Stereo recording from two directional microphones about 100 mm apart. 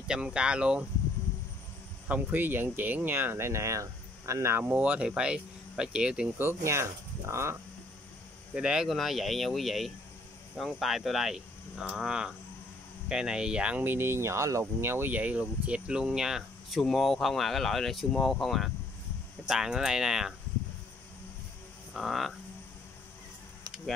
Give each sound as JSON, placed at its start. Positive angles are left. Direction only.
{"t": 0.1, "sound": "speech", "side_deg": -10}
{"t": 2.0, "sound": "speech", "side_deg": -15}
{"t": 4.6, "sound": "speech", "side_deg": -15}
{"t": 6.3, "sound": "speech", "side_deg": -25}
{"t": 8.5, "sound": "speech", "side_deg": -10}
{"t": 21.9, "sound": "speech", "side_deg": 0}